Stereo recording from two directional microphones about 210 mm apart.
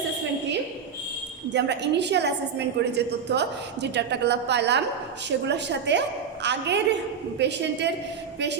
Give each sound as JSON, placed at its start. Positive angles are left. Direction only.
{"t": 1.5, "sound": "a woman's voice", "side_deg": -55}